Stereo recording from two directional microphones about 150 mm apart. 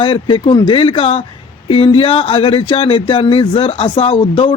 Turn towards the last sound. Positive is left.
turn(degrees=35)  # may be behind; listen again after turning